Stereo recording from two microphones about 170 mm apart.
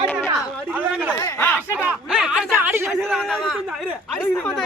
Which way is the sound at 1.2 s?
15° left (ahead or behind).